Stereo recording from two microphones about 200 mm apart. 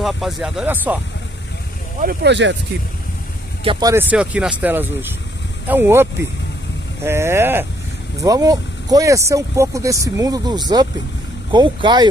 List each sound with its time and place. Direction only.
0.0 s speech: centre (ahead or behind)
2.2 s speech: 60° right (ahead or behind)
3.6 s speech: 15° right (ahead or behind)